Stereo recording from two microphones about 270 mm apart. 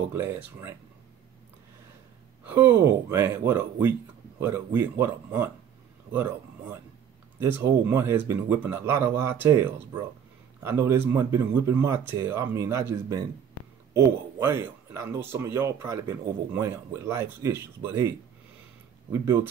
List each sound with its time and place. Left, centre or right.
0.1 s speech: centre
2.4 s speech: centre
7.3 s speech: centre
19.1 s speech: centre